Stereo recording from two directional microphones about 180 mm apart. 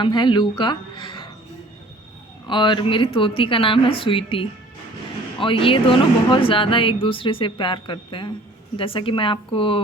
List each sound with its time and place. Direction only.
0.0 s speech: 25° left (ahead or behind)
2.5 s speech: 25° left (ahead or behind)